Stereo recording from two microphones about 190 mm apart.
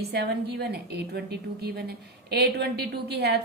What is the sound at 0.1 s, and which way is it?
A woman's voice, 60° right (ahead or behind).